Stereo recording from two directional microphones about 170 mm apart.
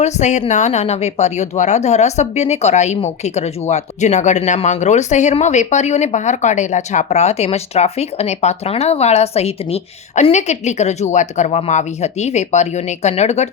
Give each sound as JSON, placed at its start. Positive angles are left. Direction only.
{"t": 0.0, "sound": "a woman's voice", "side_deg": 45}